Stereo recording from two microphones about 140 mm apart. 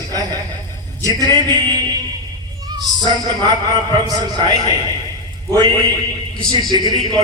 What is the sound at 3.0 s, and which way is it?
Speech, 30° right (ahead or behind).